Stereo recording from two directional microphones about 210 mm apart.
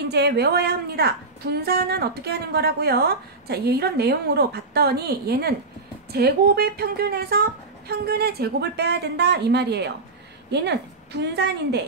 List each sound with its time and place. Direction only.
0.1 s a woman's voice: 50° right (ahead or behind)